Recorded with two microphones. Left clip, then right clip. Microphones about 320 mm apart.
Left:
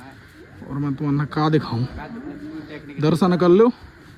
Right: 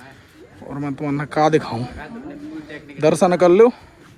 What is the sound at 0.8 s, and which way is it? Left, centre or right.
Speech, centre.